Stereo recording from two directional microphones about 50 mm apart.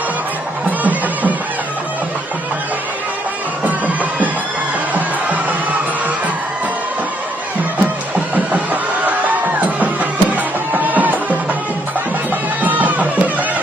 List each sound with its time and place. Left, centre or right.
3.6 s music: right
9.6 s music: right
12.6 s music: right